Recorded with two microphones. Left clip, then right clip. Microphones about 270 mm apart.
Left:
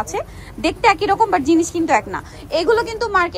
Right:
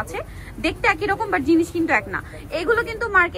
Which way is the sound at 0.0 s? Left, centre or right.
Left.